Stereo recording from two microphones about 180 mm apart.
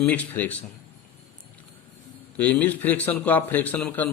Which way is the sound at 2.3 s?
10° left (ahead or behind).